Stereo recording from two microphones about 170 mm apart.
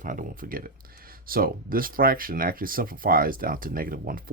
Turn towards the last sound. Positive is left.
turn(degrees=-55)  # may be behind; listen again after turning